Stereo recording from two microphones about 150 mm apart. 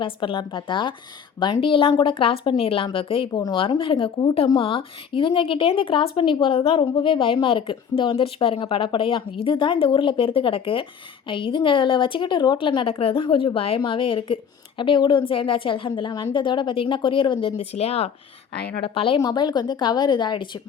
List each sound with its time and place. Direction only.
0.0 s speech: 35° left (ahead or behind)